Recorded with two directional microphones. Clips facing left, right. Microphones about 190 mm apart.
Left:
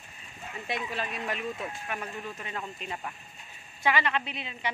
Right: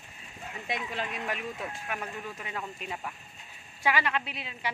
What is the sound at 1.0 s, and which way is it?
Speech, 20° right (ahead or behind).